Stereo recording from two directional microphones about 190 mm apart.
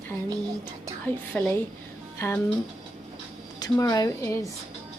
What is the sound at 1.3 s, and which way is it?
Speech, 5° left (ahead or behind).